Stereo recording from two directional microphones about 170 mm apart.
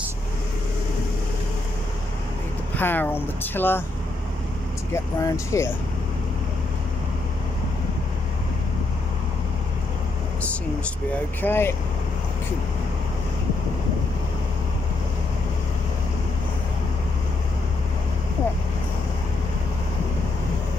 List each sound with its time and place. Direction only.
2.7 s speech: 10° left (ahead or behind)
4.9 s speech: 15° left (ahead or behind)
11.4 s speech: 15° left (ahead or behind)